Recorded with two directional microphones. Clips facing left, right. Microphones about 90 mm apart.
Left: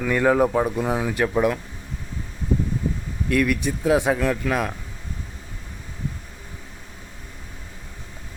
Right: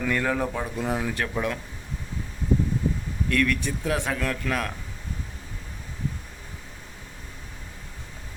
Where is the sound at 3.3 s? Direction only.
15° left (ahead or behind).